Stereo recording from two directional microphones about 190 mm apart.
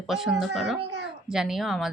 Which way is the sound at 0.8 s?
65° right (ahead or behind).